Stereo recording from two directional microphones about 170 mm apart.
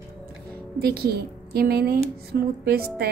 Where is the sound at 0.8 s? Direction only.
65° right (ahead or behind).